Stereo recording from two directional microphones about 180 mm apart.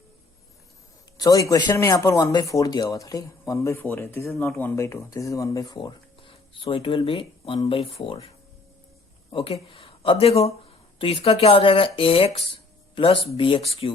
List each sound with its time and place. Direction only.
1.2 s speech: 20° left (ahead or behind)
9.3 s speech: 30° left (ahead or behind)